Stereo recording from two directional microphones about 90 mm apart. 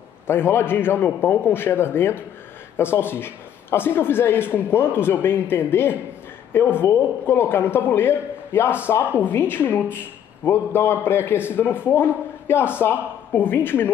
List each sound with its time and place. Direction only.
0.3 s a man's voice: 30° left (ahead or behind)